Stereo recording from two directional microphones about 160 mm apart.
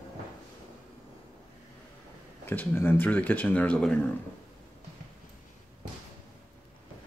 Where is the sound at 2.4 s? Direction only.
10° left (ahead or behind).